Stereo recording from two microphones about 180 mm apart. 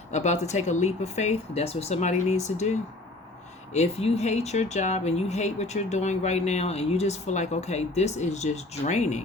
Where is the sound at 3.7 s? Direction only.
35° left (ahead or behind).